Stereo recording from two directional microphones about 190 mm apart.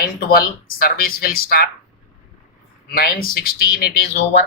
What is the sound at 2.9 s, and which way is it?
Speech, 50° left (ahead or behind).